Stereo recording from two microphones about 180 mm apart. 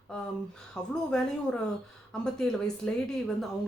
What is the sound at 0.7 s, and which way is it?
Speech, 5° left (ahead or behind).